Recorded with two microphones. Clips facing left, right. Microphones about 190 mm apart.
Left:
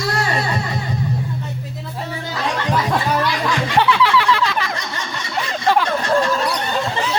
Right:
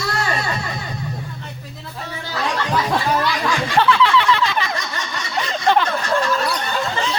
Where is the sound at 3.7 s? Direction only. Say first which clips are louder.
Even; 10° left (ahead or behind).